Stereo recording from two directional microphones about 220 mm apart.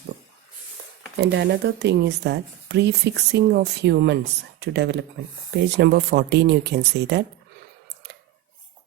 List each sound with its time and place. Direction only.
1.2 s speech: 50° right (ahead or behind)